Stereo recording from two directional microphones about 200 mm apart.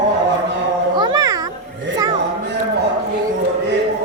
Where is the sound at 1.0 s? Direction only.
20° right (ahead or behind).